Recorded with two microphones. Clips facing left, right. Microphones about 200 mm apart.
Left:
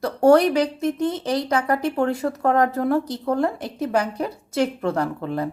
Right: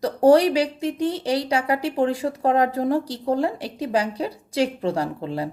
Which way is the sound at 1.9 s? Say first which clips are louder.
Even; 35° right (ahead or behind).